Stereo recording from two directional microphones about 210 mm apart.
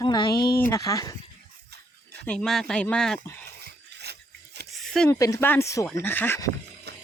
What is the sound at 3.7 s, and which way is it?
Filing, 50° right (ahead or behind).